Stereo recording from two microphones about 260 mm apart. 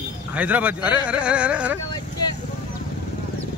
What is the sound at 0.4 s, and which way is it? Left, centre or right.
Speech, centre.